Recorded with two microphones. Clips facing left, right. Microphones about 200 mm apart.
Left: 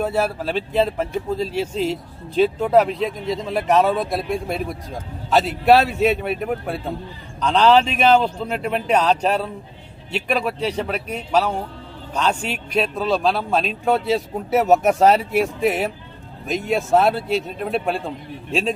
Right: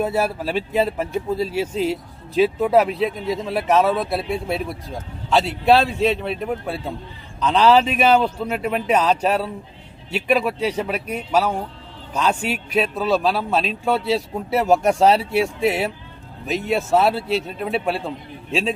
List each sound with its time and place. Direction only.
0.0 s a man's voice: 10° right (ahead or behind)